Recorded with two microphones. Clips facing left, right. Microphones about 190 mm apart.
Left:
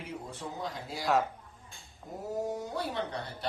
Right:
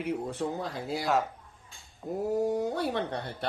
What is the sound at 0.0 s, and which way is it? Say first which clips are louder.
Speech: right 9 dB; 60° right (ahead or behind).